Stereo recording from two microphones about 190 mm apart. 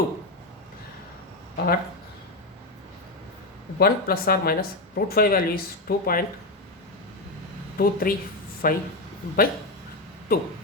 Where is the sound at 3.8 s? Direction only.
55° left (ahead or behind).